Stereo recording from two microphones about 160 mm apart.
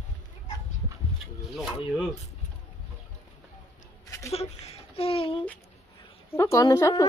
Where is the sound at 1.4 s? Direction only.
5° right (ahead or behind).